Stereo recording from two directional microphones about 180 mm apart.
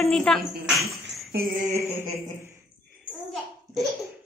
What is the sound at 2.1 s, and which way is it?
Speech, 15° right (ahead or behind).